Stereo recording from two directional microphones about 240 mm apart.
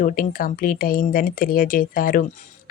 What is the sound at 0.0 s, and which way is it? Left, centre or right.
Speech, left.